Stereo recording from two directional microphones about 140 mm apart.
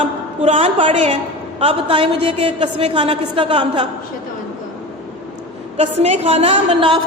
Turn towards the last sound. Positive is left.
turn(degrees=-40)  # may be behind; listen again after turning